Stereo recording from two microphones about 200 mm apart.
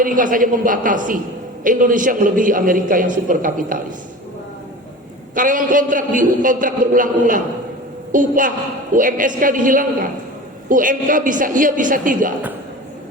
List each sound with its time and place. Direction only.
0.0 s a man's voice: 40° right (ahead or behind)
5.3 s a man's voice: 40° right (ahead or behind)